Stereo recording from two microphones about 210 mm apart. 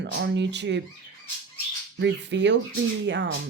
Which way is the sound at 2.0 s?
60° right (ahead or behind).